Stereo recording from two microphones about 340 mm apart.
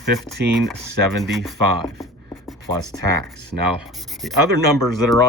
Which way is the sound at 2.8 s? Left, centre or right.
Right.